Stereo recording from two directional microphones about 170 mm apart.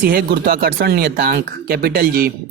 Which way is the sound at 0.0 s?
60° right (ahead or behind).